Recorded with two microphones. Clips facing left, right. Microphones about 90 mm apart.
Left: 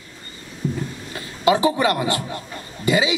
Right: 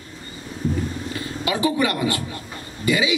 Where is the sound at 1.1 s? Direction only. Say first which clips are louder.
Left 10 dB; 30° left (ahead or behind).